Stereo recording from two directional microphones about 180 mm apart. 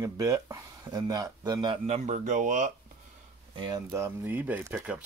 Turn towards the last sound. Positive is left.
turn(degrees=-5)  # may be behind; listen again after turning